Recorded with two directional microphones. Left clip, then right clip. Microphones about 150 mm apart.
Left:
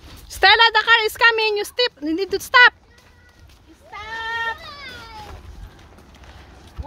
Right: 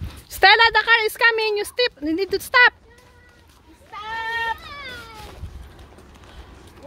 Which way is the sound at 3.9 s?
85° left.